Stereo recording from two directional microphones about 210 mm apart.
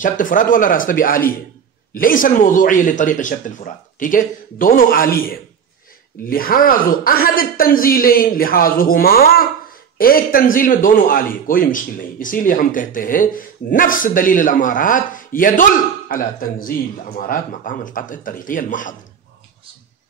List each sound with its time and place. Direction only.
0.0 s speech: 40° left (ahead or behind)